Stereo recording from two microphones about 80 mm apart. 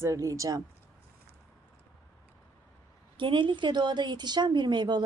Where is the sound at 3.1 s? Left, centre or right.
Right.